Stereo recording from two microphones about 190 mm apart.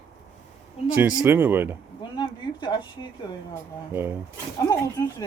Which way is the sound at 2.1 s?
25° left (ahead or behind).